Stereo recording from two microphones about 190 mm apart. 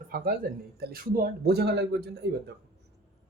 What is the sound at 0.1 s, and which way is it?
Speech, 50° right (ahead or behind).